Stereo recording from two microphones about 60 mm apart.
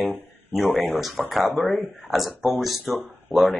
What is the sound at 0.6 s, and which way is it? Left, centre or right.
Speech, centre.